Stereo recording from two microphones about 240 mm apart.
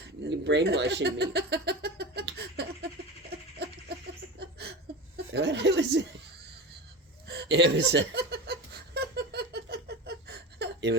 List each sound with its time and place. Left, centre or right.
0.3 s a sound: right
5.1 s speech: right
7.3 s laughter: right